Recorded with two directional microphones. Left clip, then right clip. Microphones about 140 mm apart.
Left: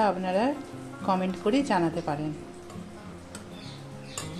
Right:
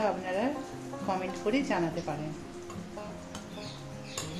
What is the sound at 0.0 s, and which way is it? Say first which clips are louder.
Speech: left 5 dB; 55° left (ahead or behind).